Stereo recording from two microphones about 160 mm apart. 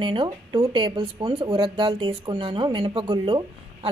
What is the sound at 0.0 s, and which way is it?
Speech, 30° right (ahead or behind).